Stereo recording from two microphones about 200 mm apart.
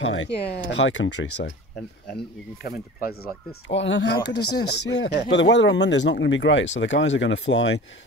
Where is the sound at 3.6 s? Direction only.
65° left (ahead or behind).